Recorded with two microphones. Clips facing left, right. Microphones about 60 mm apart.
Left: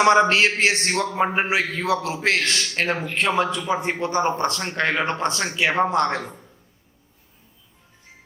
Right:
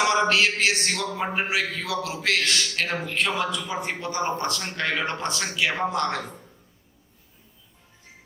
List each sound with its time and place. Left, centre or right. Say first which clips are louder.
0.0 s a man's voice: left 5 dB; left